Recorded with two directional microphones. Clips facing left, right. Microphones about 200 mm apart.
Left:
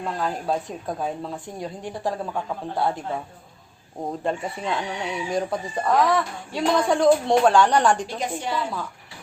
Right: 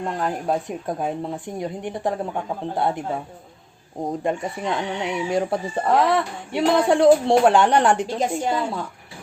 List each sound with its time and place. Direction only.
0.0 s speech: 15° right (ahead or behind)
4.0 s speech: 15° right (ahead or behind)